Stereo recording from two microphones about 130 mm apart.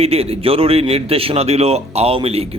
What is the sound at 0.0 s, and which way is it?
A man's voice, 50° right (ahead or behind).